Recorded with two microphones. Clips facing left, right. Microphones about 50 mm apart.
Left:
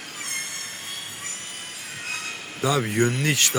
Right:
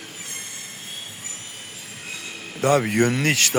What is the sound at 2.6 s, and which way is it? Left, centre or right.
Speech, right.